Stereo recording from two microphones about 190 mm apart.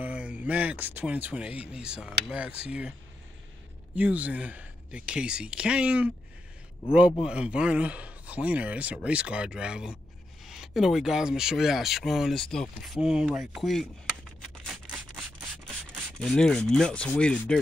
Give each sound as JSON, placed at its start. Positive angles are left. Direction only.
{"t": 0.0, "sound": "speech", "side_deg": -5}
{"t": 3.9, "sound": "speech", "side_deg": -5}
{"t": 7.2, "sound": "speech", "side_deg": -5}
{"t": 14.7, "sound": "rub", "side_deg": 0}